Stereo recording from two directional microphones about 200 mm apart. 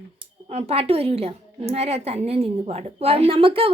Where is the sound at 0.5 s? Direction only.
30° right (ahead or behind).